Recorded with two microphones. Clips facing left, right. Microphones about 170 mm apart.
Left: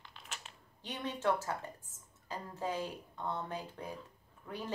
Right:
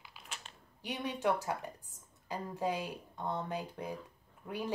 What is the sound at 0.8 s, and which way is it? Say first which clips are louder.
A woman's voice: right 2 dB; 10° right (ahead or behind).